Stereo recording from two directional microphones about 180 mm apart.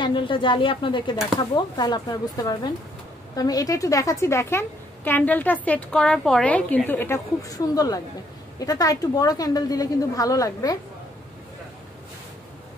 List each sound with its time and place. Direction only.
0.0 s a woman's voice: 25° left (ahead or behind)